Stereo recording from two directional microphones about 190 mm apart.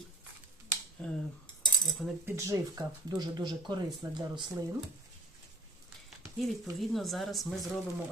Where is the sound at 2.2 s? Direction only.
15° right (ahead or behind).